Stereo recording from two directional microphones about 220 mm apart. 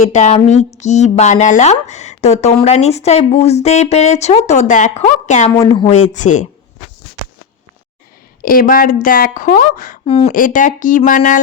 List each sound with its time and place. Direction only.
0.1 s speech: 30° left (ahead or behind)
5.5 s speech: 20° left (ahead or behind)
8.4 s speech: 40° left (ahead or behind)